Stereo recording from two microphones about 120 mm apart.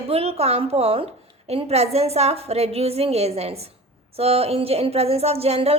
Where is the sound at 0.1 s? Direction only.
55° right (ahead or behind).